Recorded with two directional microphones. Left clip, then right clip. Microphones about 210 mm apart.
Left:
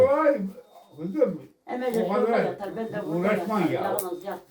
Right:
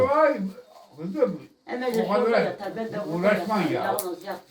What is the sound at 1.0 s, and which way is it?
Speech, 15° right (ahead or behind).